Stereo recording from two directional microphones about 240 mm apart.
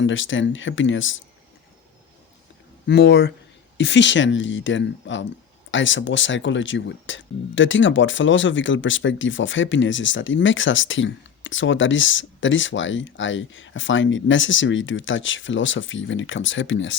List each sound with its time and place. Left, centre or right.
0.0 s speech: left
2.8 s speech: left